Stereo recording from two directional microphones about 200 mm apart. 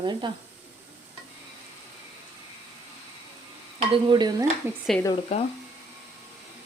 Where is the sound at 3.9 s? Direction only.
20° right (ahead or behind).